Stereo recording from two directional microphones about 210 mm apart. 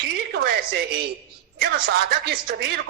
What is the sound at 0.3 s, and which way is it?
A woman's voice, 50° right (ahead or behind).